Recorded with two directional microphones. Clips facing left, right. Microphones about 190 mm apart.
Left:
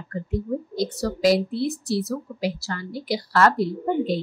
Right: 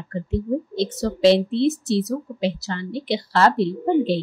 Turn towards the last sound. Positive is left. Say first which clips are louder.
# right 4 dB
turn(degrees=-25)  # may be behind; listen again after turning